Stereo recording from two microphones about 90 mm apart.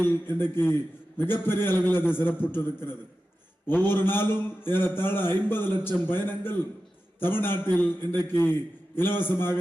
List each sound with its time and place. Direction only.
0.0 s a man's voice: 25° left (ahead or behind)